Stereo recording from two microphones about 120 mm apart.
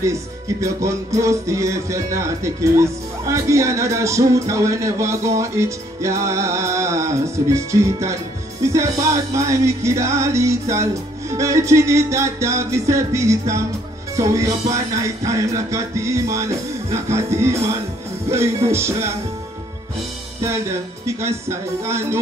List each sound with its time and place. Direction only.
0.0 s music: 25° right (ahead or behind)
21.2 s music: 25° right (ahead or behind)